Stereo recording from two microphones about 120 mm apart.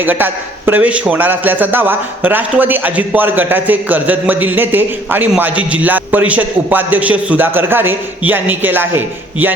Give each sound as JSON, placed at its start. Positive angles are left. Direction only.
{"t": 0.0, "sound": "a man's voice", "side_deg": -15}